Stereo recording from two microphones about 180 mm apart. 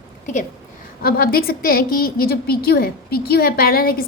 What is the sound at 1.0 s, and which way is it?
A woman's voice, 55° left (ahead or behind).